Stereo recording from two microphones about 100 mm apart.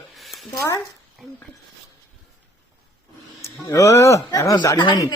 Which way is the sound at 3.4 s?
30° left (ahead or behind).